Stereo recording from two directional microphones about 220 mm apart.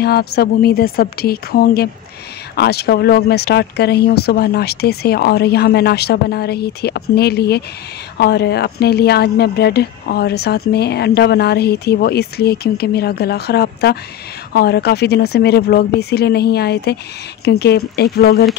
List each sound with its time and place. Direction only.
0.0 s speech: 45° left (ahead or behind)